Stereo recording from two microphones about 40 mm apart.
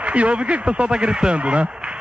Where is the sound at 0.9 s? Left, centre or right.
Right.